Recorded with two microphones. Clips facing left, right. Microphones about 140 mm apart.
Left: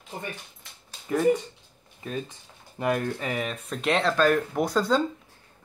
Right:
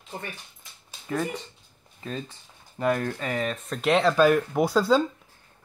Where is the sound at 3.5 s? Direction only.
Centre (ahead or behind).